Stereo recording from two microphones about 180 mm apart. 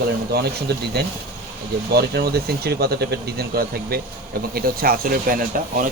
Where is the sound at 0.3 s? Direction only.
60° right (ahead or behind).